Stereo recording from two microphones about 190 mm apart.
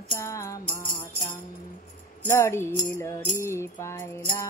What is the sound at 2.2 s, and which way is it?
Music, 15° left (ahead or behind).